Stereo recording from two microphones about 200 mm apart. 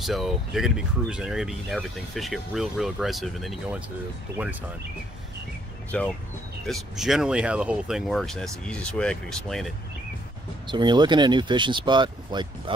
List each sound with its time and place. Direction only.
0.0 s speech: centre (ahead or behind)
5.9 s speech: 5° left (ahead or behind)
10.7 s speech: 20° right (ahead or behind)